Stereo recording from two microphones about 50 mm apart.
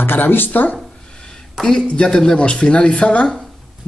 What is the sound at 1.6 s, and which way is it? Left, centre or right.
A man's voice, centre.